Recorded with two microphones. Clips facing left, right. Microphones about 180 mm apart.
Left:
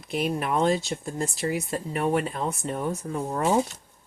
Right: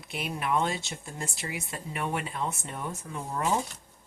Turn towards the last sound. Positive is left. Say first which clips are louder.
# left 5 dB
turn(degrees=40)  # may be behind; listen again after turning